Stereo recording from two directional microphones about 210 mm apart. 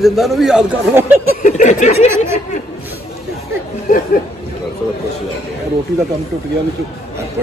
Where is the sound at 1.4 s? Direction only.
35° left (ahead or behind).